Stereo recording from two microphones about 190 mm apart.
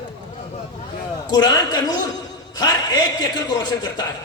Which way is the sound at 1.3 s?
20° left (ahead or behind).